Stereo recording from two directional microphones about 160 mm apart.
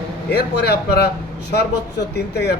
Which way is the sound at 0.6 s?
90° left.